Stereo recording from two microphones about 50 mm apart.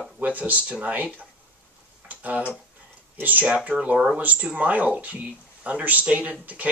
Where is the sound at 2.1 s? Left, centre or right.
Right.